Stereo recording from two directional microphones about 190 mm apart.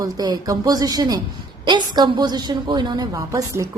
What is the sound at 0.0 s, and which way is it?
A woman's voice, 20° right (ahead or behind).